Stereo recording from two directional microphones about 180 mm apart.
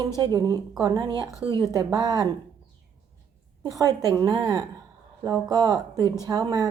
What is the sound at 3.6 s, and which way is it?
Speech, 20° right (ahead or behind).